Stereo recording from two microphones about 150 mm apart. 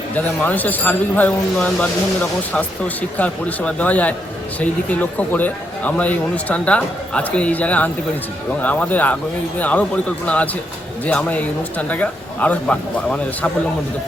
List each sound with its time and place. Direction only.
0.1 s speech: 10° left (ahead or behind)